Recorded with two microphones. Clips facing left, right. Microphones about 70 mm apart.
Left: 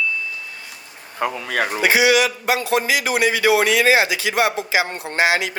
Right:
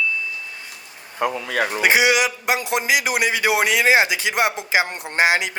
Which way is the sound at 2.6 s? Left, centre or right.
Centre.